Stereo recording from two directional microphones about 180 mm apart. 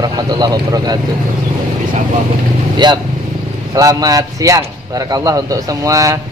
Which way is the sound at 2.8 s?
25° right (ahead or behind).